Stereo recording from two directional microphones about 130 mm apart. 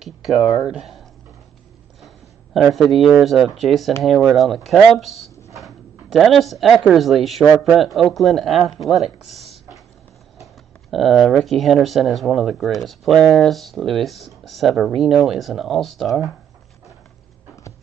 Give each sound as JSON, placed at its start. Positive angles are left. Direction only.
{"t": 0.0, "sound": "speech", "side_deg": 0}
{"t": 2.0, "sound": "a sound", "side_deg": 0}
{"t": 2.7, "sound": "speech", "side_deg": 0}
{"t": 7.4, "sound": "speech", "side_deg": -15}
{"t": 7.7, "sound": "speech", "side_deg": 0}